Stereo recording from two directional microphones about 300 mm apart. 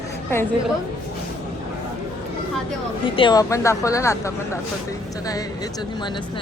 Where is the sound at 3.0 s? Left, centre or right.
Centre.